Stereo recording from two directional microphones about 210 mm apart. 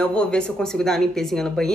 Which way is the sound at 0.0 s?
5° left (ahead or behind).